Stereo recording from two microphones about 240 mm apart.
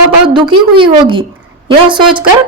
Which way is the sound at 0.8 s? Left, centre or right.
Right.